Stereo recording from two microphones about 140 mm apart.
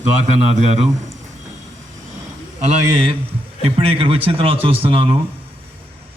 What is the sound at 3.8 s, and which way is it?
Speech, 40° right (ahead or behind).